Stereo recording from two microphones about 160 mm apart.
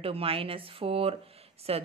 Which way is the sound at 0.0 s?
35° right (ahead or behind).